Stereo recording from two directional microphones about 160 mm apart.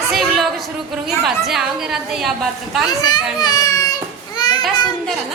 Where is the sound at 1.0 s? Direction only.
Centre (ahead or behind).